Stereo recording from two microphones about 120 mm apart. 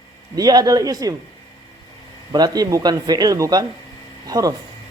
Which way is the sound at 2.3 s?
35° right (ahead or behind).